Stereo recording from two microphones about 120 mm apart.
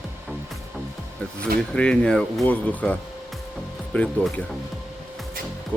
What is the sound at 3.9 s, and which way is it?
Speech, 10° left (ahead or behind).